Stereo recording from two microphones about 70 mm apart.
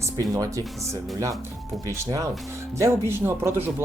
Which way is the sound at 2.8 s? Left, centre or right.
Right.